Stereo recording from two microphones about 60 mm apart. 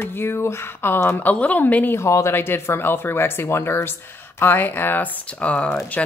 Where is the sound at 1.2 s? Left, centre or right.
Left.